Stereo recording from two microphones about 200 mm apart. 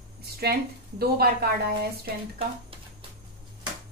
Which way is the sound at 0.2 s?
50° right (ahead or behind).